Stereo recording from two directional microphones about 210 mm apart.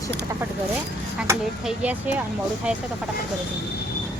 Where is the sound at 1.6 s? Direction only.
5° right (ahead or behind).